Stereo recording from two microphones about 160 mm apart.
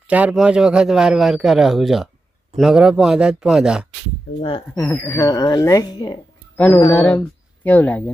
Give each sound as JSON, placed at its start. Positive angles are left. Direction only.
{"t": 0.1, "sound": "a man's voice", "side_deg": -10}
{"t": 4.4, "sound": "speech", "side_deg": 35}
{"t": 4.8, "sound": "speech", "side_deg": 15}
{"t": 6.6, "sound": "speech", "side_deg": 10}